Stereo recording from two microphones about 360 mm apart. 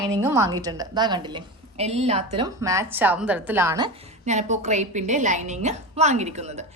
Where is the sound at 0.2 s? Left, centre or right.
Centre.